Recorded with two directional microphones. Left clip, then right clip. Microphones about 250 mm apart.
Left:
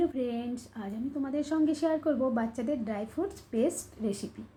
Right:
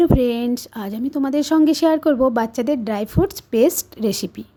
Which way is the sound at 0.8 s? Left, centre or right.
Right.